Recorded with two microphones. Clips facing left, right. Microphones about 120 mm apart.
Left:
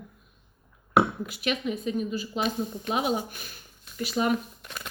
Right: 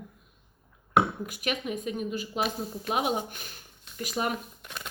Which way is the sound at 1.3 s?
45° right (ahead or behind).